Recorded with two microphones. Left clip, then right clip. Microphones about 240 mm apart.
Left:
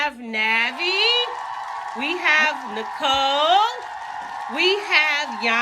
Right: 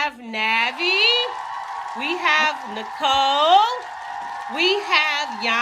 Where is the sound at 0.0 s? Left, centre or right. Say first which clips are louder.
Left 1 dB; centre.